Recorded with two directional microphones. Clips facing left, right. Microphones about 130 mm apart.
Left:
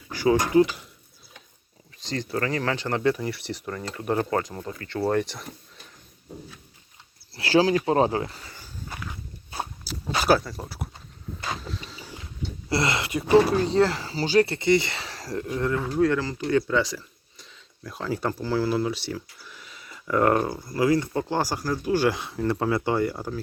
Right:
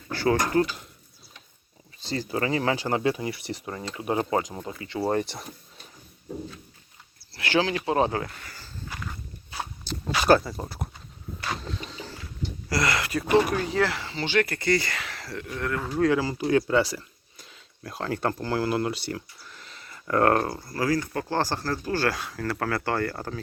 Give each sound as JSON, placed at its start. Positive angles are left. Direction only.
{"t": 0.1, "sound": "speech", "side_deg": 15}
{"t": 2.0, "sound": "speech", "side_deg": -10}
{"t": 7.3, "sound": "speech", "side_deg": 35}
{"t": 8.4, "sound": "a sound", "side_deg": 15}
{"t": 10.2, "sound": "speech", "side_deg": 0}
{"t": 11.7, "sound": "boat", "side_deg": 0}
{"t": 12.6, "sound": "speech", "side_deg": 25}
{"t": 15.4, "sound": "speech", "side_deg": 25}
{"t": 16.0, "sound": "speech", "side_deg": -5}
{"t": 20.6, "sound": "speech", "side_deg": 20}